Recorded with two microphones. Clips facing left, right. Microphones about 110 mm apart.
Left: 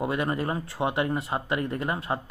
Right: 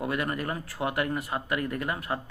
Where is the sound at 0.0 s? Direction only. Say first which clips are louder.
Left 3 dB; 25° left (ahead or behind).